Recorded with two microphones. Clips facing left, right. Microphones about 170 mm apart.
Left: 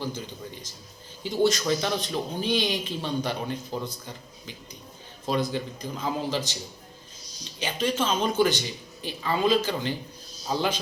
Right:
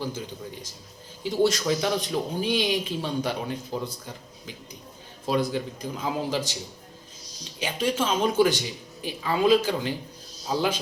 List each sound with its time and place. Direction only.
1.2 s speech: 5° right (ahead or behind)
7.6 s speech: 10° right (ahead or behind)